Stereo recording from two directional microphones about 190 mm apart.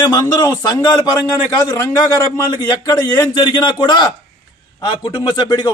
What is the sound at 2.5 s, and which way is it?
A man's voice, 20° left (ahead or behind).